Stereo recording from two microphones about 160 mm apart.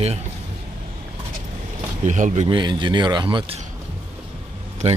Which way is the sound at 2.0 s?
50° right (ahead or behind).